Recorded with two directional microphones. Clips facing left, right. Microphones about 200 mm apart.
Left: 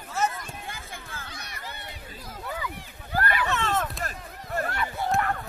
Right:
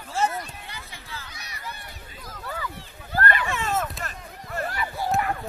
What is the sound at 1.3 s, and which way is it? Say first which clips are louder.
Run: left 2 dB; 50° left (ahead or behind).